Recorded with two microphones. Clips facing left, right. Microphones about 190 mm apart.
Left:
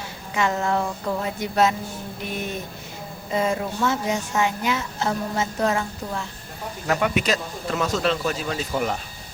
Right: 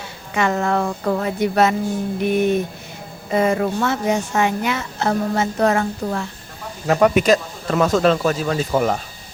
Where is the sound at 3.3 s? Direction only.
65° right (ahead or behind).